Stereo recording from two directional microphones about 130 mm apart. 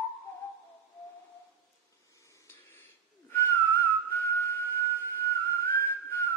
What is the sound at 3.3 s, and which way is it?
Whistling, 20° left (ahead or behind).